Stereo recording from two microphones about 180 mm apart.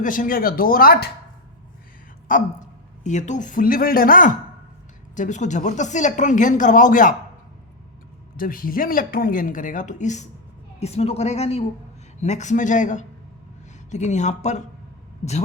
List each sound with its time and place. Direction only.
0.0 s speech: 50° left (ahead or behind)
2.3 s speech: 50° left (ahead or behind)
8.4 s a woman's voice: 50° left (ahead or behind)